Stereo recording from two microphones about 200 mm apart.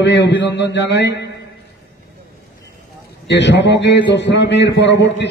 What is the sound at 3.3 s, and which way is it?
A man's voice, 60° left (ahead or behind).